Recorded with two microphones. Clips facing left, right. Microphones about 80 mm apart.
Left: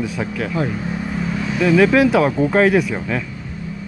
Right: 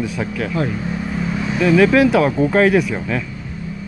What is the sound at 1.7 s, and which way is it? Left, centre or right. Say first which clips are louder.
Speech: right 1 dB; left.